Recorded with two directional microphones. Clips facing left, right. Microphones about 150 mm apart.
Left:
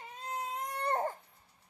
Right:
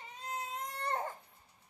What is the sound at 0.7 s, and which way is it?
Baby cry, 45° left (ahead or behind).